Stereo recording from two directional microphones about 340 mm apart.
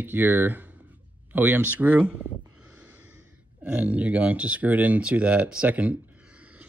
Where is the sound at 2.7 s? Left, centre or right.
Centre.